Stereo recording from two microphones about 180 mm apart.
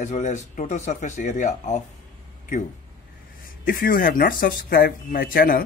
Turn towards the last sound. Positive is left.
turn(degrees=55)  # may be behind; listen again after turning